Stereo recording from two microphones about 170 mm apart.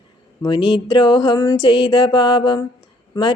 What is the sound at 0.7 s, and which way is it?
Mantra, 30° left (ahead or behind).